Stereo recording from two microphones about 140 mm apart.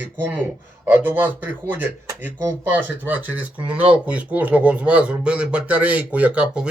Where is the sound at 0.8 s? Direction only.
15° right (ahead or behind).